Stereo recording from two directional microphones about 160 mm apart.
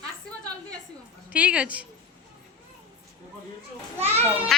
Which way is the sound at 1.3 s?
10° right (ahead or behind).